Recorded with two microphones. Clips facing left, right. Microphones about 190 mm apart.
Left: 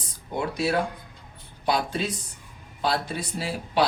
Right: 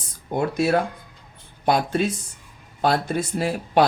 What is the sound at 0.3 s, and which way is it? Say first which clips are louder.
Speech: right 5 dB; 45° right (ahead or behind).